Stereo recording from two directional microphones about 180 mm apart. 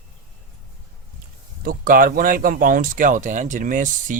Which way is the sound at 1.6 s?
50° right (ahead or behind).